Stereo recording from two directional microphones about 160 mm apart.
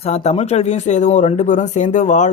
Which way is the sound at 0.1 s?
40° left (ahead or behind).